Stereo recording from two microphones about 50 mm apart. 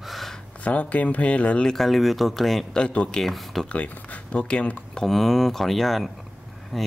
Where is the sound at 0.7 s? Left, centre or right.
Left.